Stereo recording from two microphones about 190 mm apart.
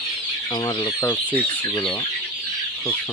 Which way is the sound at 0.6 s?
15° left (ahead or behind).